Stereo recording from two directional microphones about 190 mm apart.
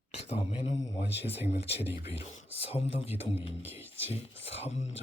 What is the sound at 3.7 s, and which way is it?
Speech, 10° right (ahead or behind).